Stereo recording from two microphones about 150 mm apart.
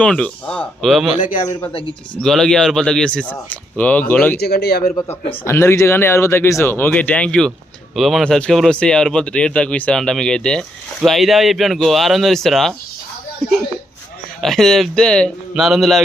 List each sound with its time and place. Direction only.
0.0 s speech: 5° left (ahead or behind)
1.2 s a man's voice: 55° left (ahead or behind)
1.9 s speech: 5° left (ahead or behind)
4.4 s speech: 90° left
5.2 s speech: 35° left (ahead or behind)
5.5 s speech: 15° left (ahead or behind); by 16.0 s centre (ahead or behind)